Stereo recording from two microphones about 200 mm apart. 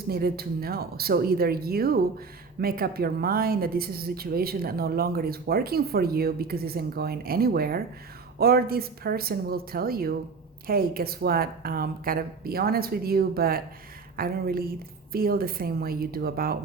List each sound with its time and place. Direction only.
0.1 s speech: 50° right (ahead or behind)